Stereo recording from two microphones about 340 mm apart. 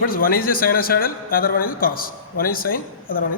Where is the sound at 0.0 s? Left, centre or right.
Left.